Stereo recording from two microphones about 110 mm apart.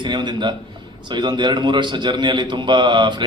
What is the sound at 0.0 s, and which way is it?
A man's voice, 45° right (ahead or behind).